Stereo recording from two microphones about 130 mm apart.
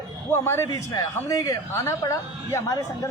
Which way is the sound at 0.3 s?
20° left (ahead or behind).